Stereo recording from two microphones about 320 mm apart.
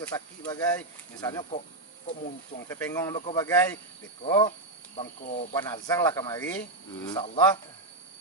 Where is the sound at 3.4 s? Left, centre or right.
Centre.